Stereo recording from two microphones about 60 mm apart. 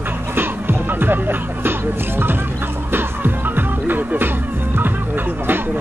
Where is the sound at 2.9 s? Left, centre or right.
Right.